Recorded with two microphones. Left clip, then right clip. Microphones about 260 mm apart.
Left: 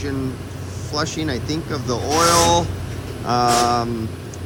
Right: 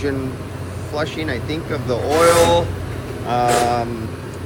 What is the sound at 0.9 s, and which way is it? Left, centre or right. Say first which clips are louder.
Speech: right 1 dB; centre.